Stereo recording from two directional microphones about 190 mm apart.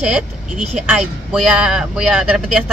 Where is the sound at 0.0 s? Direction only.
5° right (ahead or behind).